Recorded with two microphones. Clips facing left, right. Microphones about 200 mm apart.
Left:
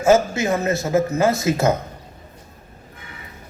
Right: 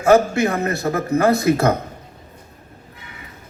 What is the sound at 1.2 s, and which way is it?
Speech, 20° left (ahead or behind).